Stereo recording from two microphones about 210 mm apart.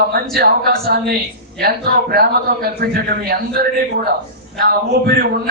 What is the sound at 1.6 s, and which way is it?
A man's voice, 45° right (ahead or behind).